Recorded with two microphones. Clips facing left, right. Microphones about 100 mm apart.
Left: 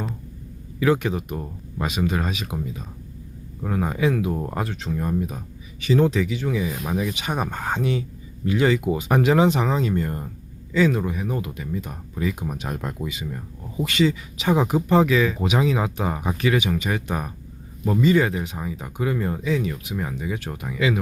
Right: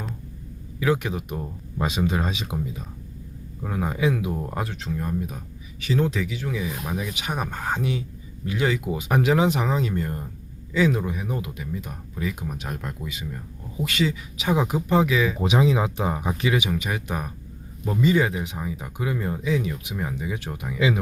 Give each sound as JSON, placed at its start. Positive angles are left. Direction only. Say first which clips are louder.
{"t": 0.8, "sound": "speech", "louder": "left 3 dB", "side_deg": -5}
{"t": 1.8, "sound": "speech", "louder": "even", "side_deg": -20}
{"t": 3.6, "sound": "speech", "louder": "left 2 dB", "side_deg": -5}
{"t": 10.8, "sound": "speech", "louder": "left 2 dB", "side_deg": -15}
{"t": 13.1, "sound": "speech", "louder": "left 3 dB", "side_deg": 0}
{"t": 15.4, "sound": "speech", "louder": "right 1 dB", "side_deg": -20}
{"t": 18.5, "sound": "speech", "louder": "left 1 dB", "side_deg": 0}